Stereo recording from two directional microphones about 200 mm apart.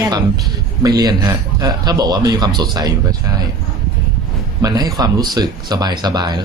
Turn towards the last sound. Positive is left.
turn(degrees=-20)  # may be behind; listen again after turning